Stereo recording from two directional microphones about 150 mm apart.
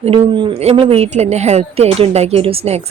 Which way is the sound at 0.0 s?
35° right (ahead or behind).